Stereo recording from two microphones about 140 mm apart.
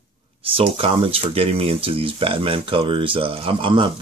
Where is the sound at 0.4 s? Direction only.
40° right (ahead or behind).